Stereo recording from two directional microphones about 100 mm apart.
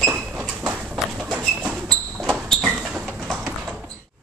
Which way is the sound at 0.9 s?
10° right (ahead or behind).